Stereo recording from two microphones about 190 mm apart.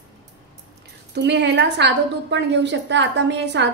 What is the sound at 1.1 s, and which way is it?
A woman's voice, 65° right (ahead or behind).